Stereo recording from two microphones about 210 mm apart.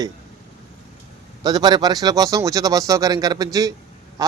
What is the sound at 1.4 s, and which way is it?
Speech, 20° right (ahead or behind).